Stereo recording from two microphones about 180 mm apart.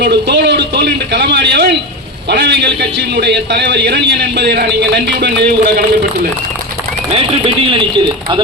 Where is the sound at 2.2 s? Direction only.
75° right (ahead or behind).